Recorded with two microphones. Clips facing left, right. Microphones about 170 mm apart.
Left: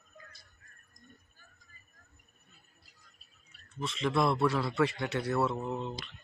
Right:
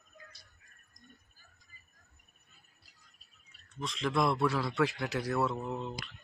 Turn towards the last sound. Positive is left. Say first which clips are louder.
# left 2 dB
turn(degrees=0)  # may be behind; listen again after turning